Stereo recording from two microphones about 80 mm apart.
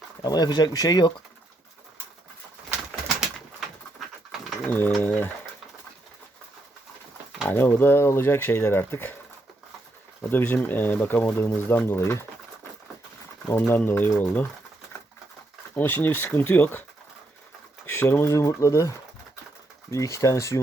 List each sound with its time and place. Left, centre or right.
0.2 s speech: left
4.6 s speech: left
7.4 s speech: left
10.2 s speech: left
13.5 s speech: left
15.7 s speech: left
17.9 s speech: left